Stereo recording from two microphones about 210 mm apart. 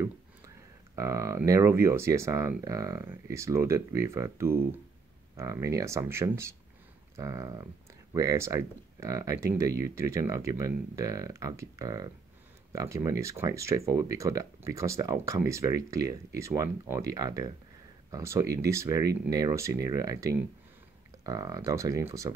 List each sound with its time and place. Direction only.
0.9 s speech: 15° right (ahead or behind)